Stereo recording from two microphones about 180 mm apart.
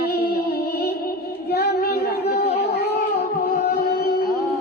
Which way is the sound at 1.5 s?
60° left (ahead or behind).